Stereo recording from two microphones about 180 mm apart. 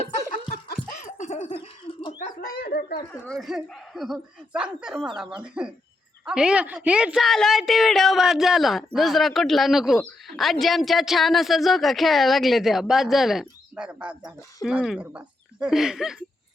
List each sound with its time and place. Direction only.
0.7 s a sound: 45° left (ahead or behind)
2.4 s bird: 60° left (ahead or behind)
3.1 s a woman's voice: 5° left (ahead or behind)